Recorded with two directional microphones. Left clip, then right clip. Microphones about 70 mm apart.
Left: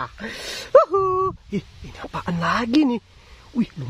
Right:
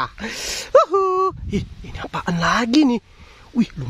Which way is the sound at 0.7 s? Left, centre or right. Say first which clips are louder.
Right 1 dB; centre.